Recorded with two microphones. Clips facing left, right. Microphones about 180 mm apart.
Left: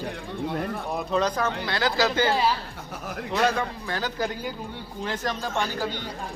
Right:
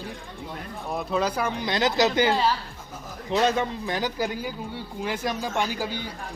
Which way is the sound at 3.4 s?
20° right (ahead or behind).